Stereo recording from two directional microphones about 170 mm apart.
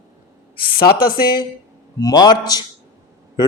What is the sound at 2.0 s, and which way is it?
Speech, 25° left (ahead or behind).